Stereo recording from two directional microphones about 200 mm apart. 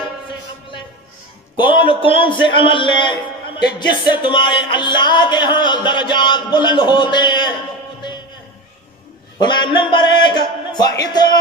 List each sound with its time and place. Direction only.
1.5 s speech: 25° left (ahead or behind)
9.4 s speech: 20° left (ahead or behind)